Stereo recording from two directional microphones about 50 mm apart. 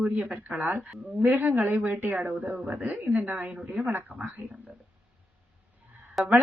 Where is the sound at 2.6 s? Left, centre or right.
Right.